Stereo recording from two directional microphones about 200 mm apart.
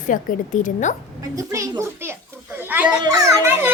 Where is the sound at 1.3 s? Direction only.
15° right (ahead or behind).